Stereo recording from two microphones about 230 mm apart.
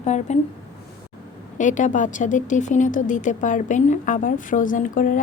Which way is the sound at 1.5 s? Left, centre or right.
Left.